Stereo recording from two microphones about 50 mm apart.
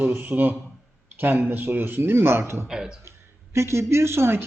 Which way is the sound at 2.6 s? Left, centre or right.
Centre.